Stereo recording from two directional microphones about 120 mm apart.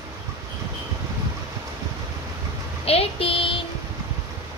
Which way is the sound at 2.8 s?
55° left (ahead or behind).